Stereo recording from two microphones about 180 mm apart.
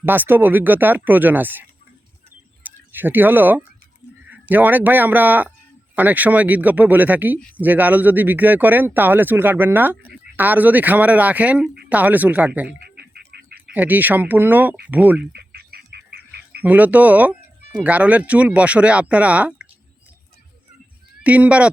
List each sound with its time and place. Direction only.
0.0 s speech: 10° right (ahead or behind)
2.6 s speech: 10° right (ahead or behind)
13.0 s bird: 65° right (ahead or behind)
13.7 s speech: 10° right (ahead or behind)
15.2 s bird: 60° right (ahead or behind)
16.6 s speech: 10° right (ahead or behind)
21.2 s speech: 5° right (ahead or behind)